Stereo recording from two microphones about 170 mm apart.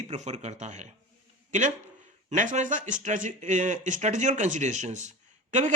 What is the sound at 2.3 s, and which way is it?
Speech, 45° right (ahead or behind).